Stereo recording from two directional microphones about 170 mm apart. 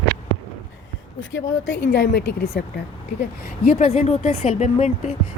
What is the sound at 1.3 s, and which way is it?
Speech, 90° left.